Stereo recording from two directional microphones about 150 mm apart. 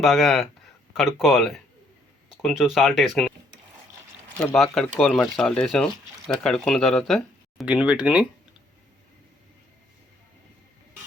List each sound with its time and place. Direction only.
0.0 s speech: centre (ahead or behind)
4.4 s speech: 5° left (ahead or behind)